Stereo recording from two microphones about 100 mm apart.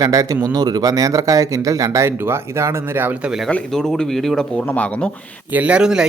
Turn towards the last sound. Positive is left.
turn(degrees=-10)  # may be behind; listen again after turning